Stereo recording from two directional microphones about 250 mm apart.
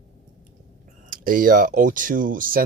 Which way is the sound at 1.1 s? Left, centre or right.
Right.